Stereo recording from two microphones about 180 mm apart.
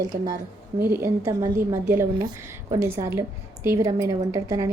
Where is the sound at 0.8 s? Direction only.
15° right (ahead or behind).